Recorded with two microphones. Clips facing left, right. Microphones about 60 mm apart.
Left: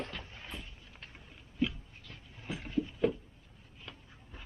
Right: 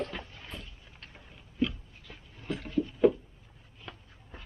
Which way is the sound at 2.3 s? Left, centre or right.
Centre.